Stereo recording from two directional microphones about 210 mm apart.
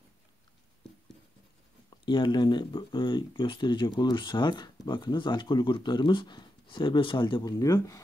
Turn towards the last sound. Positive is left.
turn(degrees=15)  # may be behind; listen again after turning